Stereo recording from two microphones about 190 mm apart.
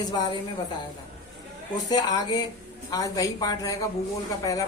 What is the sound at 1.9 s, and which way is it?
A woman's voice, 20° left (ahead or behind).